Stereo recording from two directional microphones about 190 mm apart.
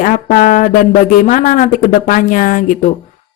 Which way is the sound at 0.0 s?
45° left (ahead or behind).